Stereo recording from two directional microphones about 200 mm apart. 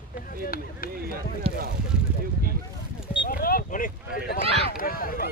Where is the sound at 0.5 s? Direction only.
45° left (ahead or behind).